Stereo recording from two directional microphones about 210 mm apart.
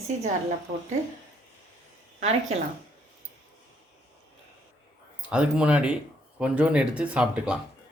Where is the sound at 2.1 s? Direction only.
30° right (ahead or behind).